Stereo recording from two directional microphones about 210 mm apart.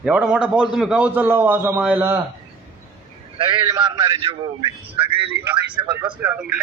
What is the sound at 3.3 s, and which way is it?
A man's voice, 20° right (ahead or behind).